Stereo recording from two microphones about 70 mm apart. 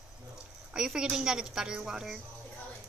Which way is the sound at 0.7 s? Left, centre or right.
Centre.